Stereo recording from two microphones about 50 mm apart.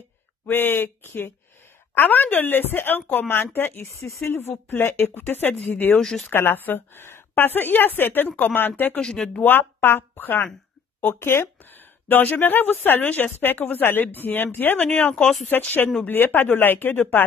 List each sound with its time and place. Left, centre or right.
0.5 s a woman's voice: left
0.8 s speech: left
2.0 s a woman's voice: left
3.9 s speech: left
4.3 s a woman's voice: left
5.9 s speech: centre
6.3 s a woman's voice: left
8.9 s speech: centre
9.4 s a woman's voice: left